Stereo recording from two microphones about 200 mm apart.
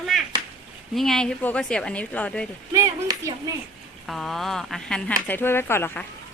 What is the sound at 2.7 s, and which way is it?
Speech, 15° right (ahead or behind).